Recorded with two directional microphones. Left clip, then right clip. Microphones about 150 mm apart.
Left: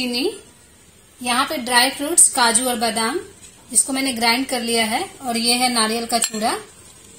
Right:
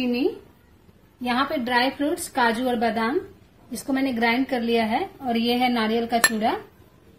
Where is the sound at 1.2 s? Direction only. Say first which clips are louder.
Left 4 dB; 55° left (ahead or behind).